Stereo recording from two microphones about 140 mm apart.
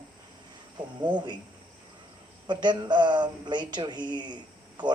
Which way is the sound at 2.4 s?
35° right (ahead or behind).